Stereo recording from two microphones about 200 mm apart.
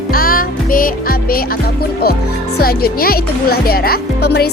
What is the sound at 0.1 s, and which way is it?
Music, 45° left (ahead or behind).